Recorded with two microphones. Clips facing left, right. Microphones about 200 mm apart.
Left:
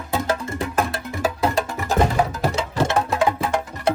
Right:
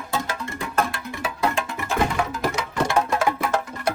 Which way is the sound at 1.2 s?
40° left (ahead or behind).